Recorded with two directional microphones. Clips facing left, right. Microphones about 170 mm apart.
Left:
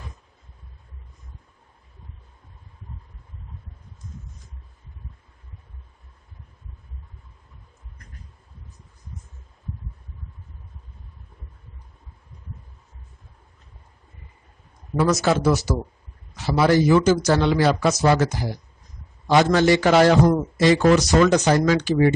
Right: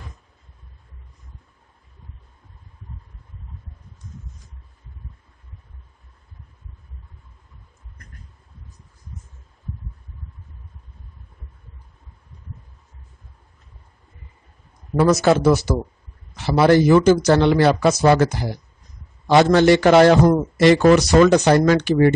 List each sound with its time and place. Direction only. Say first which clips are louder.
15.1 s a man's voice: right 4 dB; 55° right (ahead or behind)